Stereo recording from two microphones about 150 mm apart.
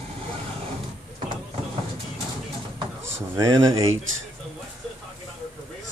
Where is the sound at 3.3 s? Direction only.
25° right (ahead or behind).